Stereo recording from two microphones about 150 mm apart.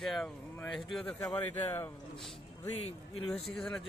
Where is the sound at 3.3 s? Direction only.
5° left (ahead or behind).